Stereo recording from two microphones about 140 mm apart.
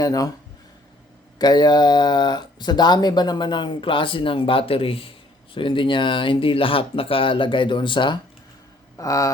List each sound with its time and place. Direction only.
0.0 s speech: 25° left (ahead or behind)
1.4 s speech: 30° left (ahead or behind)
9.0 s speech: 20° left (ahead or behind)